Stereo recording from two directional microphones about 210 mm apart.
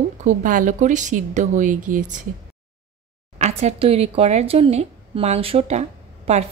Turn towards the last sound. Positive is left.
turn(degrees=-30)  # may be behind; listen again after turning